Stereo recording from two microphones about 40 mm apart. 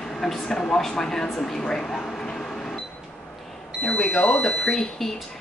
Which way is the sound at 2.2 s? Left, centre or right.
Centre.